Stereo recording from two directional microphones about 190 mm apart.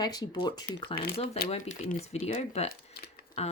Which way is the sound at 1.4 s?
35° left (ahead or behind).